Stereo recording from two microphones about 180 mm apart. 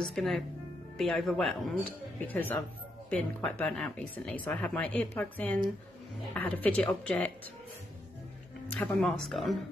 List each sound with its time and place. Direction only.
0.0 s speech: centre (ahead or behind)
8.7 s speech: 5° left (ahead or behind)